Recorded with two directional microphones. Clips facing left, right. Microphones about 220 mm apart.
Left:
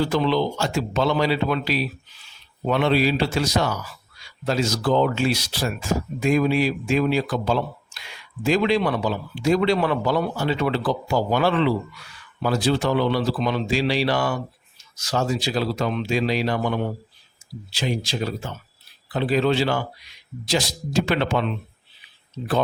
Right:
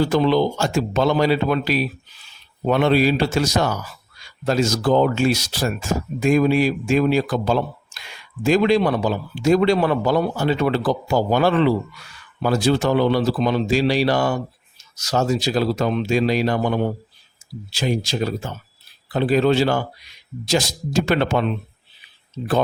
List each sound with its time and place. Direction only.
0.0 s speech: 45° right (ahead or behind)